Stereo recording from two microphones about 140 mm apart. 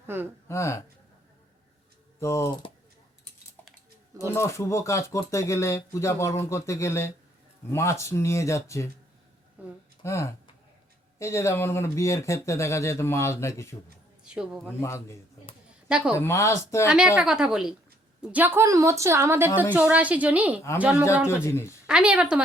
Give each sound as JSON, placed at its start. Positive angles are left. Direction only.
{"t": 0.1, "sound": "a woman's voice", "side_deg": -15}
{"t": 0.4, "sound": "speech", "side_deg": 20}
{"t": 2.2, "sound": "speech", "side_deg": 20}
{"t": 4.3, "sound": "speech", "side_deg": 20}
{"t": 9.6, "sound": "a sound", "side_deg": -10}
{"t": 10.0, "sound": "speech", "side_deg": 20}
{"t": 14.3, "sound": "a woman's voice", "side_deg": -5}
{"t": 14.8, "sound": "speech", "side_deg": 20}
{"t": 15.9, "sound": "a woman's voice", "side_deg": -5}
{"t": 16.1, "sound": "speech", "side_deg": 20}
{"t": 17.2, "sound": "a woman's voice", "side_deg": -5}
{"t": 21.4, "sound": "speech", "side_deg": 20}
{"t": 21.8, "sound": "a woman's voice", "side_deg": -5}